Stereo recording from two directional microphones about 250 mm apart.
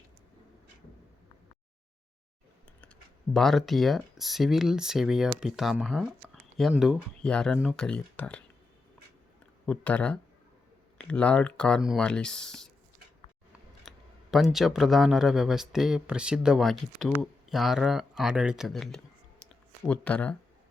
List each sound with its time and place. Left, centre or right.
3.3 s speech: centre
9.6 s speech: centre
13.8 s speech: centre